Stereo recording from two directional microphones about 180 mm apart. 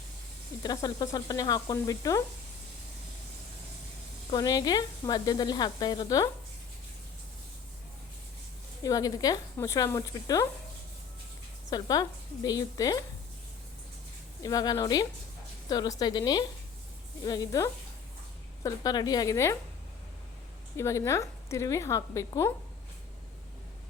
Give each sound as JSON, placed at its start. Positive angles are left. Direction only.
{"t": 0.6, "sound": "speech", "side_deg": 20}
{"t": 4.3, "sound": "speech", "side_deg": 20}
{"t": 8.8, "sound": "speech", "side_deg": 20}
{"t": 11.7, "sound": "speech", "side_deg": 20}
{"t": 14.4, "sound": "speech", "side_deg": 20}
{"t": 20.7, "sound": "a woman's voice", "side_deg": 15}